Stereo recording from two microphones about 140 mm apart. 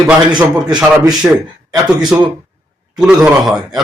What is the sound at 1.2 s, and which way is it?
Speech, 15° right (ahead or behind).